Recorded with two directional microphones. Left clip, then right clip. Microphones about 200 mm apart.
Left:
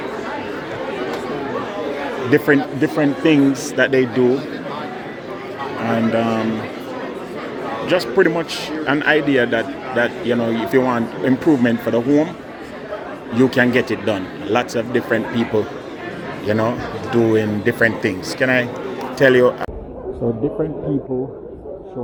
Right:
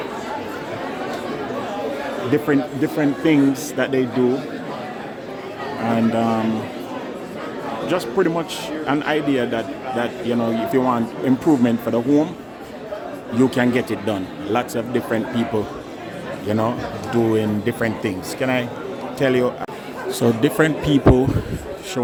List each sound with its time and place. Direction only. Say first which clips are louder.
2.3 s a man's voice: left 5 dB; 10° right (ahead or behind)
6.1 s a man's voice: left 1 dB; 15° right (ahead or behind)
7.9 s a man's voice: left 4 dB; 10° right (ahead or behind)
13.3 s a man's voice: left 3 dB; 15° right (ahead or behind)
20.4 s speech: right 4 dB; 35° right (ahead or behind)